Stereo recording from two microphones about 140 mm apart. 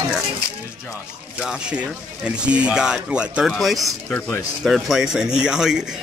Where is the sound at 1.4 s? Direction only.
5° right (ahead or behind).